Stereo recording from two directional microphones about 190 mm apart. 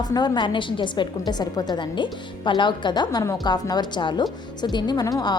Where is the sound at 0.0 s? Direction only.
20° left (ahead or behind).